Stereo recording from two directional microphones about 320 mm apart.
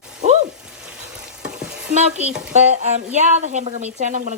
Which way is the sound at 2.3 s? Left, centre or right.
Centre.